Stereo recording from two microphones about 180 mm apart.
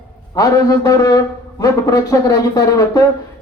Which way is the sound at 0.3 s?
20° left (ahead or behind).